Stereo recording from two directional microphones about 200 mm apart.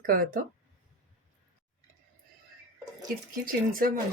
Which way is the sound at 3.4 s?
45° right (ahead or behind).